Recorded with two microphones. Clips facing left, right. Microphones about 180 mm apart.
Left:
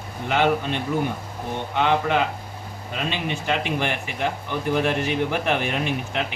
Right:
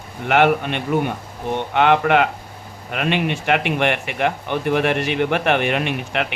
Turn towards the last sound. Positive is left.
turn(degrees=-70)  # may be behind; listen again after turning